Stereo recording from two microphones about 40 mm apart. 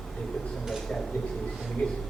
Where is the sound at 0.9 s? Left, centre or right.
Centre.